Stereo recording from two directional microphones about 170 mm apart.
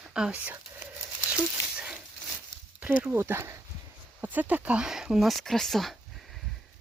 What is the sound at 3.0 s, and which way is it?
Speech, 15° right (ahead or behind).